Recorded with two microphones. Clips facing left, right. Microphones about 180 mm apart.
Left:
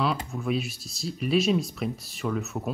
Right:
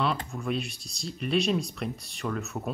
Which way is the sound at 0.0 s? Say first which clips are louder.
Left 2 dB; centre (ahead or behind).